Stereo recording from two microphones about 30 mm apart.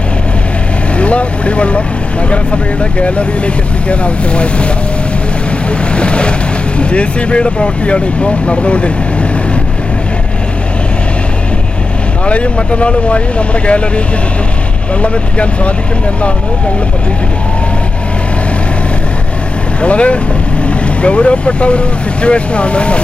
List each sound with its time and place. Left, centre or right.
0.9 s speech: left
3.0 s speech: left
5.9 s waves: left
6.7 s speech: left
12.2 s speech: left
15.0 s speech: left
19.8 s speech: left